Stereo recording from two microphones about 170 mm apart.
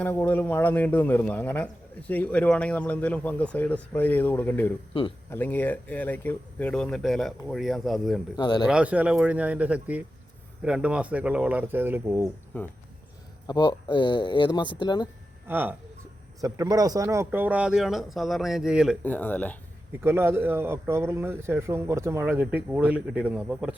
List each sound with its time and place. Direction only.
0.0 s a man's voice: 10° left (ahead or behind)
8.4 s speech: 25° left (ahead or behind)
8.6 s speech: 5° right (ahead or behind)
12.5 s a man's voice: 10° left (ahead or behind)
13.5 s speech: 25° left (ahead or behind)
15.4 s speech: 10° right (ahead or behind)
19.0 s a man's voice: 10° left (ahead or behind)
20.0 s speech: 15° right (ahead or behind)